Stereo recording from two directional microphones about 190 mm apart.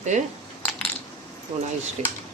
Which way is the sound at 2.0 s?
35° right (ahead or behind).